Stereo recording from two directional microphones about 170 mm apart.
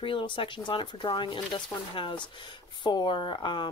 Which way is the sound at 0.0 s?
30° left (ahead or behind).